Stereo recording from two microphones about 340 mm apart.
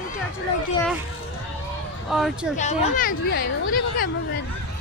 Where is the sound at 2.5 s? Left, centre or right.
Left.